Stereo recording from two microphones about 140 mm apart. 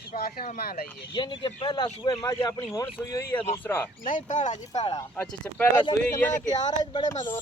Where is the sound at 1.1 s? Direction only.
35° left (ahead or behind); by 3.8 s 15° left (ahead or behind).